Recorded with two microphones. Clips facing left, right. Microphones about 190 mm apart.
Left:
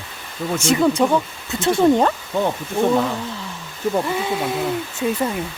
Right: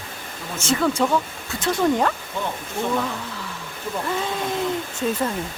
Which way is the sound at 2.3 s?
60° left (ahead or behind).